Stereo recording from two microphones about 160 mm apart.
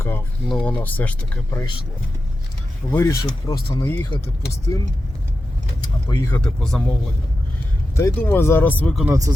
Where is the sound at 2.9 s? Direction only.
20° left (ahead or behind).